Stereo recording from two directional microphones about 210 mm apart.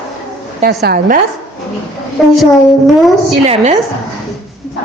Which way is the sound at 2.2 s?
Centre (ahead or behind).